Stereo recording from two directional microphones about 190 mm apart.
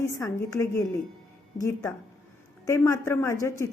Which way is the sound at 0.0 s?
15° left (ahead or behind).